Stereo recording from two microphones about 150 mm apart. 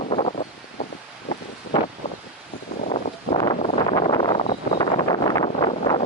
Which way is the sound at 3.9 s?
30° left (ahead or behind).